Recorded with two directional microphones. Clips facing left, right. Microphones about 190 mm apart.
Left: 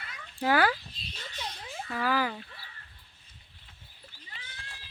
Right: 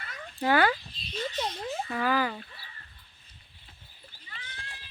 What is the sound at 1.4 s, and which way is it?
Speech, 50° right (ahead or behind).